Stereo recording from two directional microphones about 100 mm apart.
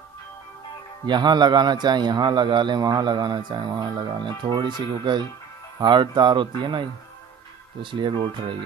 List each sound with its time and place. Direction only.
1.0 s a man's voice: 45° right (ahead or behind)